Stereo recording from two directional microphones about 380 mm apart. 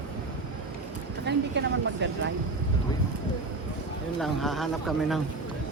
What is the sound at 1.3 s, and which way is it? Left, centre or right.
Speech, right.